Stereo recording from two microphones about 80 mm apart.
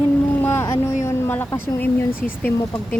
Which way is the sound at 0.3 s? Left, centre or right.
Left.